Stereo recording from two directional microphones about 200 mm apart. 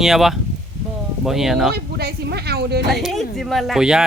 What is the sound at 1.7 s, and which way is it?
Speech, 55° right (ahead or behind).